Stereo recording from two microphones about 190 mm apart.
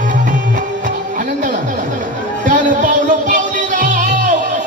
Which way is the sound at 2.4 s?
45° right (ahead or behind).